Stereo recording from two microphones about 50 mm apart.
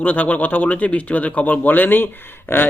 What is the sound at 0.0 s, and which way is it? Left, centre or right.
A man's voice, left.